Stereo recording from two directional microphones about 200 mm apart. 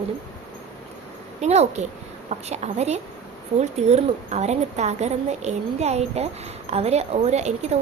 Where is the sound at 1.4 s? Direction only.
35° right (ahead or behind).